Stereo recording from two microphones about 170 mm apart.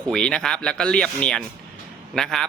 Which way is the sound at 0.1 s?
5° left (ahead or behind).